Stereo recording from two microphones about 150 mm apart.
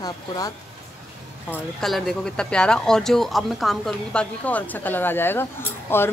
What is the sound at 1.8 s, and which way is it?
Speech, centre (ahead or behind).